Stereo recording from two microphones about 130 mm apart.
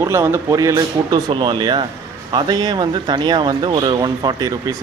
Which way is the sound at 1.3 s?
40° right (ahead or behind).